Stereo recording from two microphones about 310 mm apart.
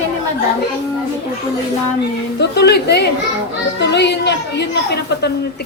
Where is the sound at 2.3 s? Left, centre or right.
Left.